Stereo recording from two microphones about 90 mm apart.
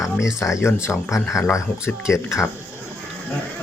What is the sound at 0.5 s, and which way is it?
Speech, 30° left (ahead or behind).